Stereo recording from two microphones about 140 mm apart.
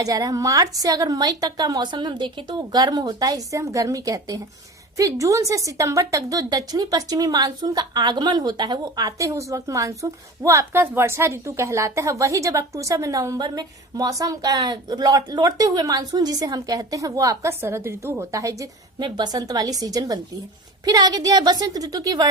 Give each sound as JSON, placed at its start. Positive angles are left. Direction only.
{"t": 0.0, "sound": "a woman's voice", "side_deg": -25}